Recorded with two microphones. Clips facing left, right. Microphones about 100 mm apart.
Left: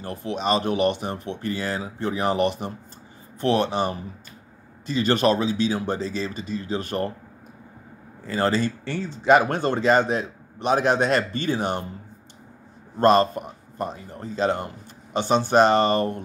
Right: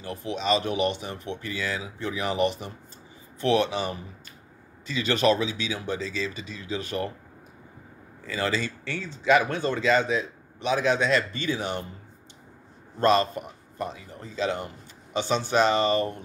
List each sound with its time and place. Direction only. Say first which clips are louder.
0.0 s speech: left 3 dB; 45° left (ahead or behind)
8.3 s speech: left 5 dB; 45° left (ahead or behind)
13.0 s speech: left 4 dB; 45° left (ahead or behind)